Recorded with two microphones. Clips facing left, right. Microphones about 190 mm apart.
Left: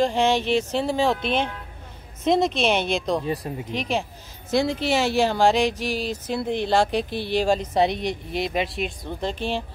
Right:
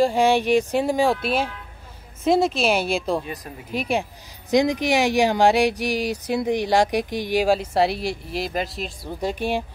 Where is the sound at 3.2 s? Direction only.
30° left (ahead or behind).